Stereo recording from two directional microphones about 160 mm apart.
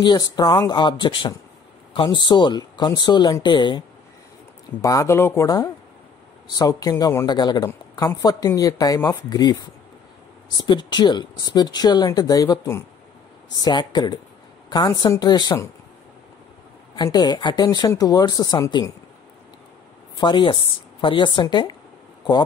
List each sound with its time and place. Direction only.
0.0 s speech: 25° left (ahead or behind)
4.8 s speech: 20° left (ahead or behind)
16.9 s speech: 25° left (ahead or behind)
20.2 s speech: 30° left (ahead or behind)